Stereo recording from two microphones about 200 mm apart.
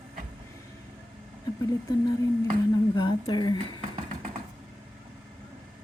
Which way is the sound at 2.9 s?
20° left (ahead or behind).